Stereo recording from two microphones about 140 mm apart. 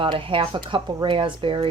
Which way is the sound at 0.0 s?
35° right (ahead or behind).